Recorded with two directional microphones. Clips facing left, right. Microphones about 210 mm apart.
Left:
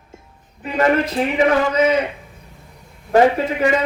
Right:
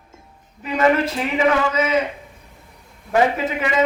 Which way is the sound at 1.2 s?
35° left (ahead or behind).